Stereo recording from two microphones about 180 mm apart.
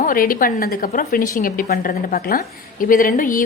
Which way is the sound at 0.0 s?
50° left (ahead or behind).